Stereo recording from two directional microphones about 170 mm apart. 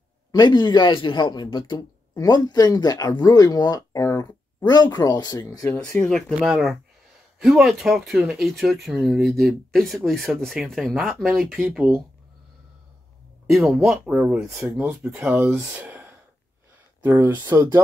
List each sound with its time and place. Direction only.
0.3 s a man's voice: 25° left (ahead or behind)
5.7 s speech: 5° left (ahead or behind)
13.5 s speech: centre (ahead or behind)
17.3 s speech: 25° right (ahead or behind)